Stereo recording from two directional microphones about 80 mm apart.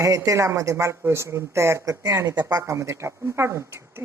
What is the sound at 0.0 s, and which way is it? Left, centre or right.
A woman's voice, right.